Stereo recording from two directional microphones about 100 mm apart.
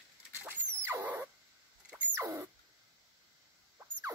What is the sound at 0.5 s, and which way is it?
Squeal, 20° right (ahead or behind).